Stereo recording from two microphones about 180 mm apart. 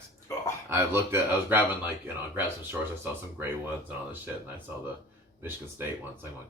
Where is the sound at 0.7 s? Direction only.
15° right (ahead or behind).